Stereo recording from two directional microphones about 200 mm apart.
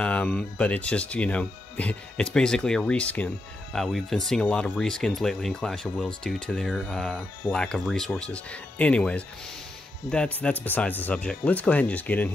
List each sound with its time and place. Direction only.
0.0 s speech: 5° left (ahead or behind)